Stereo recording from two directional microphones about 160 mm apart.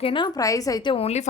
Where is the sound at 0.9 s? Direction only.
40° left (ahead or behind).